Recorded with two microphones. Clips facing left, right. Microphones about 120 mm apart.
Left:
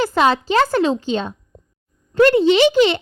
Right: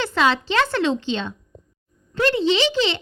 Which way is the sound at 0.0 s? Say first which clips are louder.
Left 4 dB; 40° left (ahead or behind).